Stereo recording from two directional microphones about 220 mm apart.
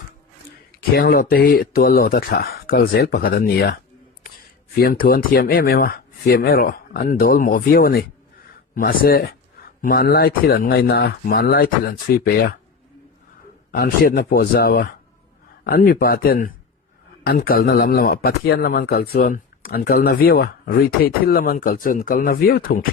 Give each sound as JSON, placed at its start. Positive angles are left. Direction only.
{"t": 0.8, "sound": "speech", "side_deg": 45}
{"t": 4.8, "sound": "speech", "side_deg": 40}
{"t": 13.7, "sound": "speech", "side_deg": 40}